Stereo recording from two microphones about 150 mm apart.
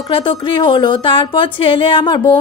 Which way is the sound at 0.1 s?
35° left (ahead or behind).